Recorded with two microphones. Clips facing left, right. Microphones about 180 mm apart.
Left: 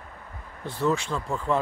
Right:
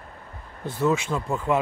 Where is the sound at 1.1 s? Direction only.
10° right (ahead or behind).